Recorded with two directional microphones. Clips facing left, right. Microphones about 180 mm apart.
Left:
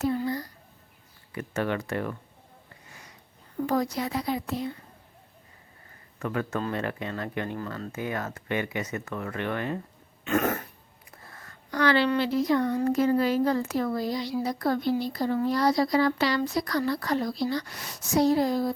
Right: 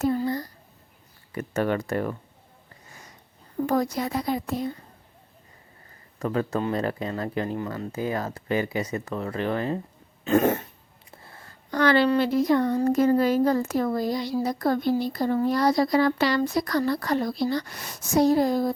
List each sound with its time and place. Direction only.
0.0 s a sound: 40° right (ahead or behind)
1.3 s speech: 40° right (ahead or behind)
3.7 s speech: 50° right (ahead or behind)
6.1 s speech: 30° right (ahead or behind)
7.6 s cough: 20° right (ahead or behind)
7.9 s speech: 30° right (ahead or behind)
10.2 s cough: 30° right (ahead or behind)
11.1 s a sound: 25° right (ahead or behind)
11.7 s speech: 45° right (ahead or behind)